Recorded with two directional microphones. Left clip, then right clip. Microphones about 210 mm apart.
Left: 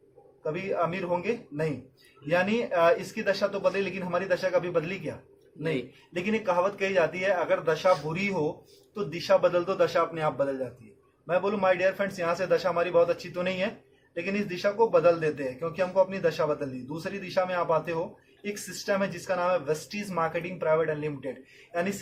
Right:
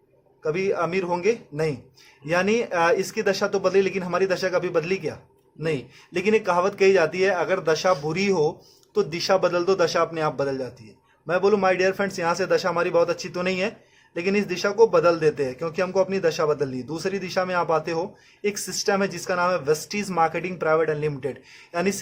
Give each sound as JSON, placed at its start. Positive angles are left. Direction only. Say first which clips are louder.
{"t": 0.4, "sound": "a man's voice", "louder": "right 5 dB", "side_deg": -50}
{"t": 6.1, "sound": "a man's voice", "louder": "right 6 dB", "side_deg": -50}